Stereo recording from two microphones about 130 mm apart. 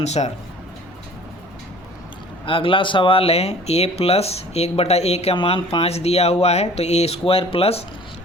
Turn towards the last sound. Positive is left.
turn(degrees=50)  # may be behind; listen again after turning